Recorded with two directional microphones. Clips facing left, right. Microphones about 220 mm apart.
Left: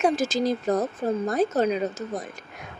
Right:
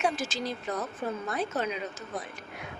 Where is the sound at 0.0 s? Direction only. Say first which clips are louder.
Left 8 dB; 40° left (ahead or behind).